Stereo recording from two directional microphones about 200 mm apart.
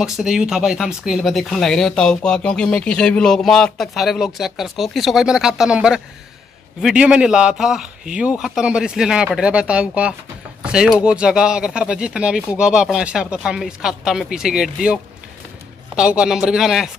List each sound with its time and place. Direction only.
0.0 s speech: centre (ahead or behind)
16.0 s speech: 5° right (ahead or behind)